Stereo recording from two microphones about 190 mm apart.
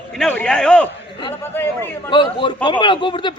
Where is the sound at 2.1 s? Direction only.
25° left (ahead or behind).